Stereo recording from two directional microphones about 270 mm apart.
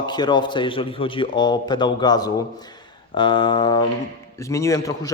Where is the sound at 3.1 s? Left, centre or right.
Centre.